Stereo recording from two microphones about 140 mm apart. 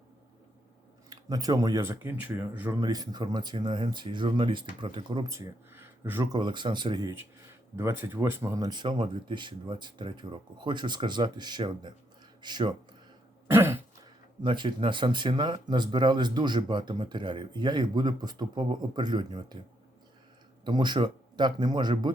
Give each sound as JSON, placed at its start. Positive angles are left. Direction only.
{"t": 1.1, "sound": "speech", "side_deg": -25}
{"t": 5.3, "sound": "speech", "side_deg": -20}
{"t": 6.3, "sound": "speech", "side_deg": -35}
{"t": 13.5, "sound": "throat clearing", "side_deg": -20}
{"t": 14.4, "sound": "speech", "side_deg": -35}
{"t": 20.7, "sound": "speech", "side_deg": -30}